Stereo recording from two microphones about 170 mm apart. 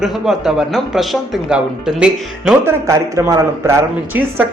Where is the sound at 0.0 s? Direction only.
Centre (ahead or behind).